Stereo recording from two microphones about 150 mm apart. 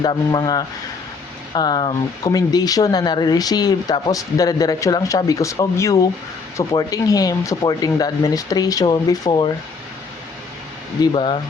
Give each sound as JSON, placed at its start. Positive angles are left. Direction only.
{"t": 0.0, "sound": "speech", "side_deg": 30}
{"t": 11.0, "sound": "speech", "side_deg": 35}